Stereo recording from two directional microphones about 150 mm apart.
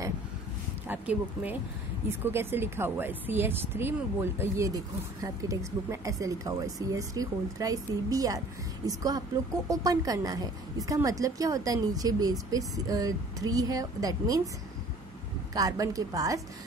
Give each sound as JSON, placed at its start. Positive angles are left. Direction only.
{"t": 0.8, "sound": "a woman's voice", "side_deg": -10}
{"t": 15.5, "sound": "a woman's voice", "side_deg": -25}